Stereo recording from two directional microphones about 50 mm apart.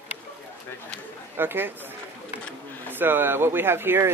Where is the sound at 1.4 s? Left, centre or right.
Right.